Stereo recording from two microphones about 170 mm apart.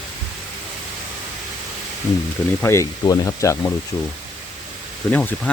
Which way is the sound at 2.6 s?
15° left (ahead or behind).